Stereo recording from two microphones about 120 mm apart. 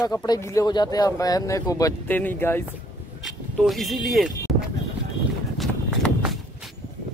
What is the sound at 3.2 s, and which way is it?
Speech, centre (ahead or behind).